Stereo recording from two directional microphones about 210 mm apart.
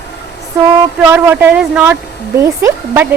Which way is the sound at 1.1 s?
10° right (ahead or behind).